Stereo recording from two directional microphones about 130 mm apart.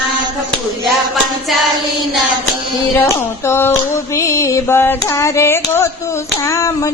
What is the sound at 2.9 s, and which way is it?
Speech, 20° left (ahead or behind).